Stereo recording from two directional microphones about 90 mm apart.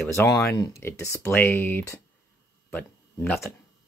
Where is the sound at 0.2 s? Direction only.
20° left (ahead or behind).